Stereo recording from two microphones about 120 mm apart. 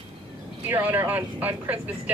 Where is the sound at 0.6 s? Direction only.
15° right (ahead or behind).